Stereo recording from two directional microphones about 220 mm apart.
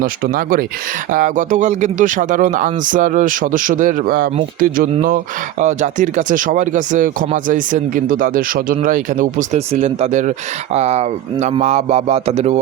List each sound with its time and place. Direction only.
0.0 s speech: 40° right (ahead or behind)